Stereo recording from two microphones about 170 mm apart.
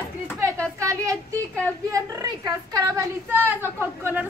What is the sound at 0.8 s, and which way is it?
A woman's voice, 20° right (ahead or behind).